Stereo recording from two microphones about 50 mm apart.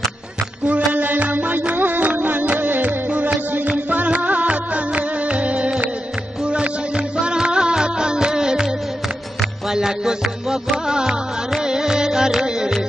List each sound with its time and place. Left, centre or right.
0.7 s music: right
9.7 s music: centre